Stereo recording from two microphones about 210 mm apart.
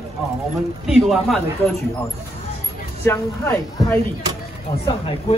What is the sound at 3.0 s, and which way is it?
Speech, 10° left (ahead or behind).